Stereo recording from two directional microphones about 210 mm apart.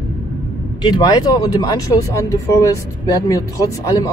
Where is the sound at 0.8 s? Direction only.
20° left (ahead or behind).